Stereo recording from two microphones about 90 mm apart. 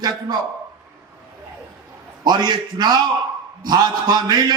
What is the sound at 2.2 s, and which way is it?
A man's voice, 50° right (ahead or behind).